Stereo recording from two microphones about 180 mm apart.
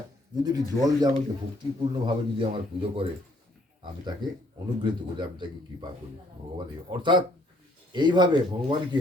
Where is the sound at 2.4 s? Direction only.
30° right (ahead or behind).